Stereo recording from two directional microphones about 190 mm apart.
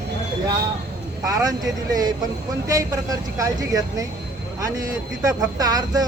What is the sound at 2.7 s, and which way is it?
Speech, 15° right (ahead or behind).